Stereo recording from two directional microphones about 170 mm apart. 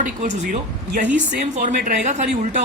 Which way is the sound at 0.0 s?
45° right (ahead or behind).